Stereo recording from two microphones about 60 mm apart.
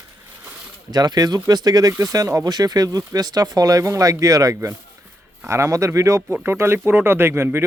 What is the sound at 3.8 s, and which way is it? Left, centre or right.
Speech, right.